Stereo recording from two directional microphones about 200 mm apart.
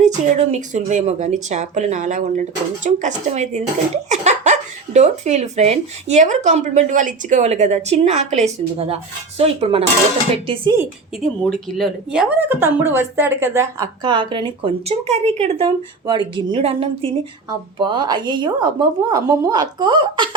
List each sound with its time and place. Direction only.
0.0 s speech: 35° right (ahead or behind)
4.1 s a sound: 35° right (ahead or behind)
4.9 s speech: 35° right (ahead or behind)
11.2 s speech: centre (ahead or behind); by 20.3 s 25° right (ahead or behind)